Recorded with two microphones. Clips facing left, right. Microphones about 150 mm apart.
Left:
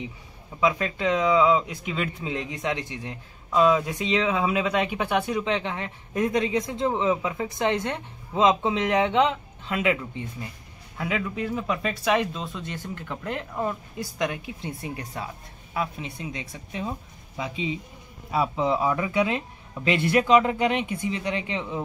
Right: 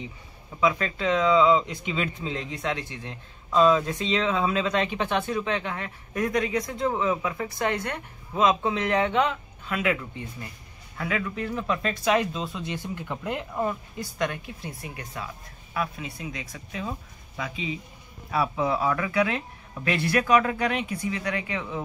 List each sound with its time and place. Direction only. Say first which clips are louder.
0.6 s speech: even; 15° left (ahead or behind)
2.3 s speech: left 3 dB; 15° left (ahead or behind); by 13.7 s 5° right (ahead or behind)
13.9 s speech: left 1 dB; 10° left (ahead or behind)
14.6 s speech: left 4 dB; 30° left (ahead or behind)